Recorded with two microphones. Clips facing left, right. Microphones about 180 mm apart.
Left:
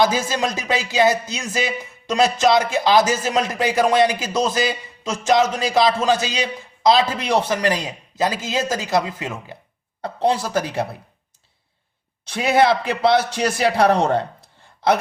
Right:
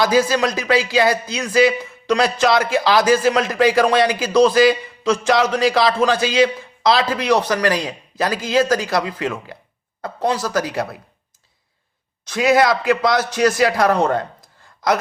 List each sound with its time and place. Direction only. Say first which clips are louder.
0.3 s speech: right 4 dB; 20° left (ahead or behind)
12.3 s speech: right 1 dB; 25° left (ahead or behind)